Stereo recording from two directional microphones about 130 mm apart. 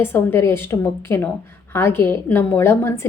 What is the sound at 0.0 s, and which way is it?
A woman's voice, 15° left (ahead or behind).